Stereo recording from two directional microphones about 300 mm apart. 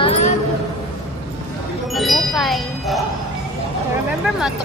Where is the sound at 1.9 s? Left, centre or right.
Centre.